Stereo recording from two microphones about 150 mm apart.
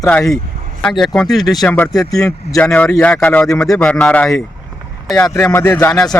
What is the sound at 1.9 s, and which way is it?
Speech, 25° left (ahead or behind).